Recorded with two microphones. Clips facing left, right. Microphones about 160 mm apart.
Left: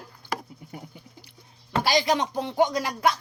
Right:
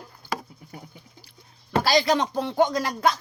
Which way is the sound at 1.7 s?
15° left (ahead or behind).